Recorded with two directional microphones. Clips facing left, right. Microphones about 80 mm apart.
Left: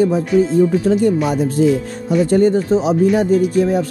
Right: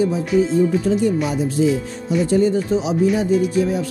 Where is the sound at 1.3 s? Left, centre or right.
Left.